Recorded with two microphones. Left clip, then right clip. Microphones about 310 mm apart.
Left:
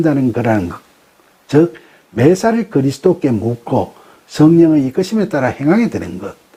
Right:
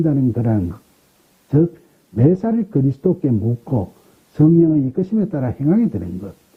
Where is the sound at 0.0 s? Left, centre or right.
Centre.